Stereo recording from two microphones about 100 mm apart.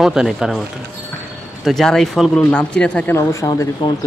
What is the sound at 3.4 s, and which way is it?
Speech, 40° left (ahead or behind).